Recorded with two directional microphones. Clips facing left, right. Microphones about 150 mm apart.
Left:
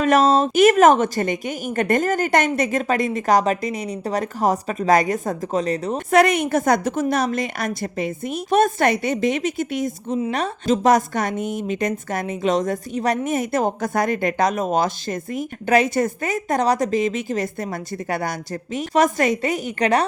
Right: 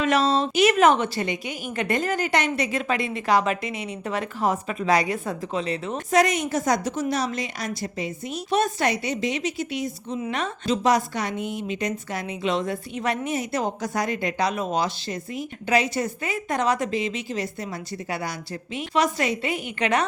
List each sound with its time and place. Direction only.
0.0 s a woman's voice: 45° left (ahead or behind)
6.1 s a woman's voice: 60° left (ahead or behind); by 20.1 s 35° left (ahead or behind)